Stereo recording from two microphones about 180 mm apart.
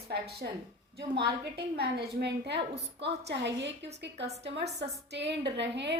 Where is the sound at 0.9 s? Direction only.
65° right (ahead or behind).